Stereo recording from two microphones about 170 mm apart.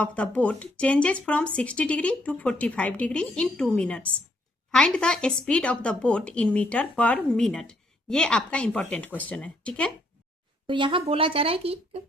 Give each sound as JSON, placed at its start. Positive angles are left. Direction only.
{"t": 0.0, "sound": "speech", "side_deg": 10}
{"t": 10.7, "sound": "speech", "side_deg": -30}